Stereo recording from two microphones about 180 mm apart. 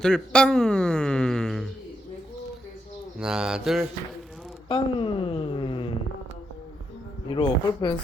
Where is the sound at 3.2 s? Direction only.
5° right (ahead or behind).